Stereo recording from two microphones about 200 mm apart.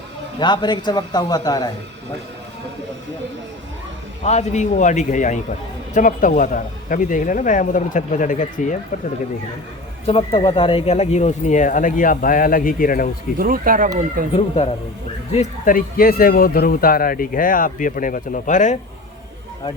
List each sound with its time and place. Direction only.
0.3 s a man's voice: 20° left (ahead or behind)
4.2 s a man's voice: 35° left (ahead or behind)
10.1 s a man's voice: 25° left (ahead or behind); by 13.1 s 45° left (ahead or behind)
13.4 s speech: 45° right (ahead or behind)
14.3 s a man's voice: 30° left (ahead or behind)